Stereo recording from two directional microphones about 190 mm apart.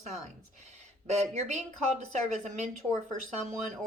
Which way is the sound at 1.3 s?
35° right (ahead or behind).